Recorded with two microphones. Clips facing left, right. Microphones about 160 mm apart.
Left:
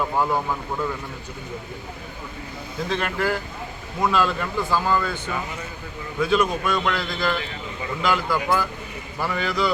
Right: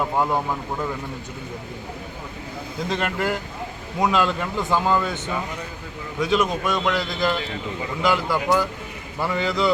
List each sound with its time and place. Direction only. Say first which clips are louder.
2.9 s speech: even; 20° right (ahead or behind)